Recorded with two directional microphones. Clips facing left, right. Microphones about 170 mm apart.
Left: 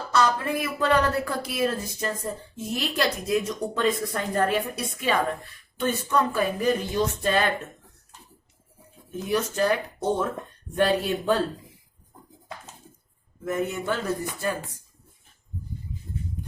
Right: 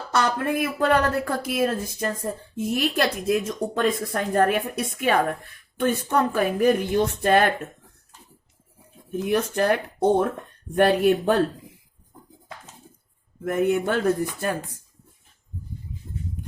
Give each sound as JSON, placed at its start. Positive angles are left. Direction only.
{"t": 0.1, "sound": "speech", "side_deg": -55}
{"t": 9.3, "sound": "speech", "side_deg": -60}
{"t": 13.4, "sound": "speech", "side_deg": -60}